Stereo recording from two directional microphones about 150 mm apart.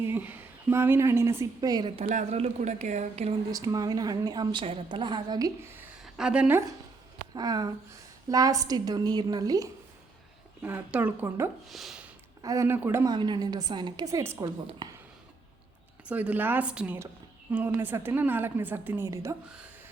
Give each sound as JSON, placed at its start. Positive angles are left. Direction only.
{"t": 0.0, "sound": "a woman's voice", "side_deg": -15}
{"t": 2.0, "sound": "speech", "side_deg": -50}
{"t": 3.5, "sound": "a woman's voice", "side_deg": -25}
{"t": 7.3, "sound": "a woman's voice", "side_deg": -25}
{"t": 10.6, "sound": "a woman's voice", "side_deg": -10}
{"t": 11.7, "sound": "speech", "side_deg": 0}
{"t": 12.4, "sound": "a woman's voice", "side_deg": -20}
{"t": 13.1, "sound": "a woman's voice", "side_deg": -30}
{"t": 16.0, "sound": "a woman's voice", "side_deg": -10}